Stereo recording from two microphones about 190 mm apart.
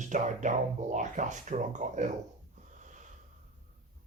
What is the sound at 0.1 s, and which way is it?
Speech, 40° right (ahead or behind).